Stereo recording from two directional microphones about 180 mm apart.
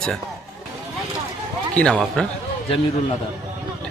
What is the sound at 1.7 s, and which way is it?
Speech, 5° left (ahead or behind).